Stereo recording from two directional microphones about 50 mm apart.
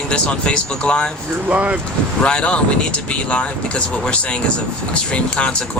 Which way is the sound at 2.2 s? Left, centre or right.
Left.